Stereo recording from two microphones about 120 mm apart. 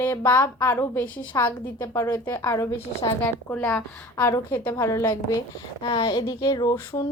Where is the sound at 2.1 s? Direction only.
15° left (ahead or behind).